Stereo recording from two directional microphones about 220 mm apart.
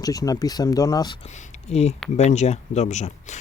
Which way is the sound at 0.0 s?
15° left (ahead or behind).